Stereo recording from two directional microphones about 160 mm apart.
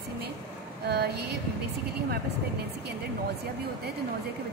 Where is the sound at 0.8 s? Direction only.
90° right.